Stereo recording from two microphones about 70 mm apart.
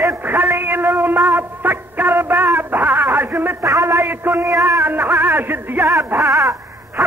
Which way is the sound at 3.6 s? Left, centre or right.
Right.